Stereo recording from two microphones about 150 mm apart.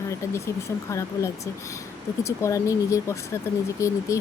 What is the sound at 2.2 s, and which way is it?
Speech, 20° left (ahead or behind).